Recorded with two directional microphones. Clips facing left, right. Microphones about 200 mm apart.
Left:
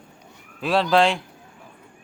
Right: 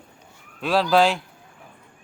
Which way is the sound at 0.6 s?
Centre (ahead or behind).